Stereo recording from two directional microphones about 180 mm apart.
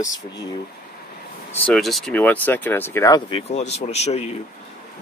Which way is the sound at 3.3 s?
35° left (ahead or behind).